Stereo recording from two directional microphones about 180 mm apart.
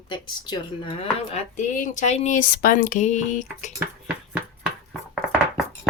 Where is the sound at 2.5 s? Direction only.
50° left (ahead or behind).